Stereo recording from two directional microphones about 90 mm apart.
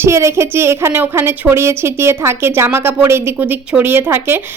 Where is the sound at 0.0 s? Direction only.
30° right (ahead or behind).